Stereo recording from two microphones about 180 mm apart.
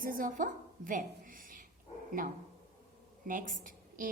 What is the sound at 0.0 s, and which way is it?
A woman's voice, 50° right (ahead or behind).